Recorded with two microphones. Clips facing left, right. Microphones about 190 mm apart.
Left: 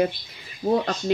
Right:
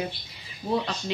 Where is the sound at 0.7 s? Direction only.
50° left (ahead or behind).